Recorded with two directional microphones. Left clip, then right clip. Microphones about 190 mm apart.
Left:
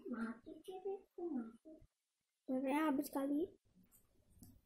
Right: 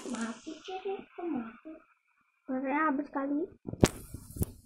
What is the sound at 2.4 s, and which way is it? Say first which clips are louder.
Speech: right 8 dB; 30° left (ahead or behind).